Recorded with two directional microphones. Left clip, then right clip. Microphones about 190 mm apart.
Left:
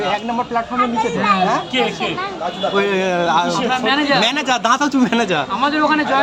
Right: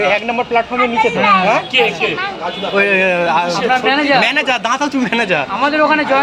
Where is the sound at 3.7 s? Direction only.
20° right (ahead or behind).